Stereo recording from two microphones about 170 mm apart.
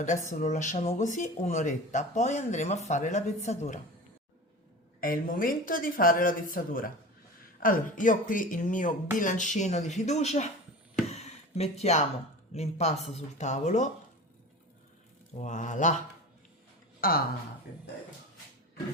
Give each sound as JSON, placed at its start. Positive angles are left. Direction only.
{"t": 0.0, "sound": "speech", "side_deg": 45}
{"t": 4.9, "sound": "speech", "side_deg": 55}
{"t": 11.0, "sound": "a sound", "side_deg": 40}
{"t": 12.5, "sound": "speech", "side_deg": 40}
{"t": 15.4, "sound": "speech", "side_deg": 45}
{"t": 17.0, "sound": "speech", "side_deg": 60}